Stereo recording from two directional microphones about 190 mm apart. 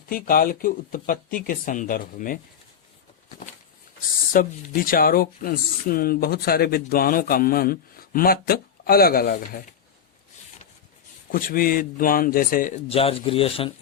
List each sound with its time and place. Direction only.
0.1 s speech: 50° left (ahead or behind)
4.3 s speech: 50° left (ahead or behind)
11.3 s speech: 50° left (ahead or behind)
12.9 s speech: 30° left (ahead or behind)